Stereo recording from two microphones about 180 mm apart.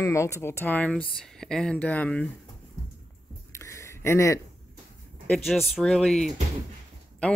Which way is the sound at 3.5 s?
15° left (ahead or behind).